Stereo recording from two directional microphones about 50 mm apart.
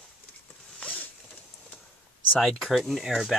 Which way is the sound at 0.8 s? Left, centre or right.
Left.